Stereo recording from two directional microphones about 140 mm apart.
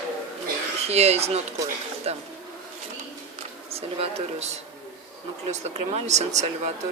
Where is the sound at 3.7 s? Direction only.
45° right (ahead or behind).